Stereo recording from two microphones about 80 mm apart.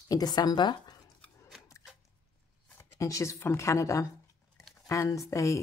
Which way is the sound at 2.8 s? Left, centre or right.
Left.